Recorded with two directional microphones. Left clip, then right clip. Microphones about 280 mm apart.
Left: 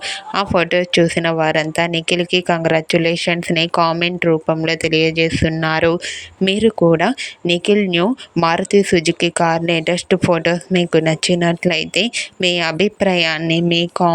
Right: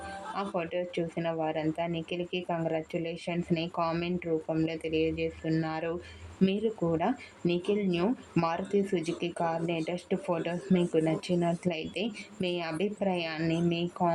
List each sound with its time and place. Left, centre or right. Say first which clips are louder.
0.3 s speech: left 17 dB; left